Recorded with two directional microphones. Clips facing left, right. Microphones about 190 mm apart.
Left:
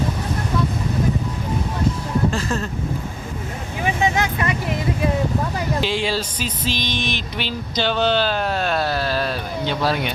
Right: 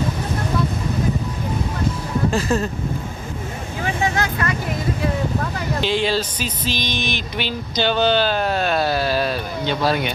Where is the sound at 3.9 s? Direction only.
20° left (ahead or behind).